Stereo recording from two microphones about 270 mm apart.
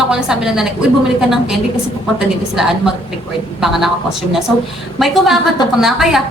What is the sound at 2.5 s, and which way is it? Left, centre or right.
A woman's voice, centre.